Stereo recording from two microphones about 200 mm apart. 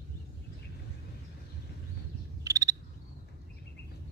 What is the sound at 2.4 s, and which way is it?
Frog, 15° right (ahead or behind).